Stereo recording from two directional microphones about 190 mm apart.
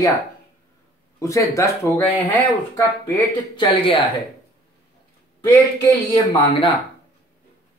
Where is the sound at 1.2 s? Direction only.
15° left (ahead or behind).